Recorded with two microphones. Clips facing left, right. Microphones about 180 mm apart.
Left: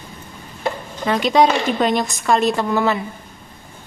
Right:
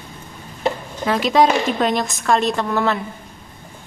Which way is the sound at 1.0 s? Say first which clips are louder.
Even; centre (ahead or behind).